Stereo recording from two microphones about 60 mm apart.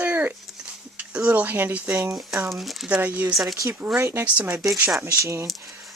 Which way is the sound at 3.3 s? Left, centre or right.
Centre.